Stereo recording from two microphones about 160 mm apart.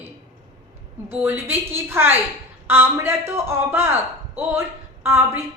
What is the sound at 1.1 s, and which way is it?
A man's voice, 15° right (ahead or behind).